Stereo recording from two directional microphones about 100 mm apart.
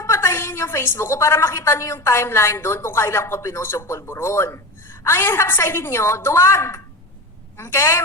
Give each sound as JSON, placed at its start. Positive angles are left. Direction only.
{"t": 0.0, "sound": "a woman's voice", "side_deg": 25}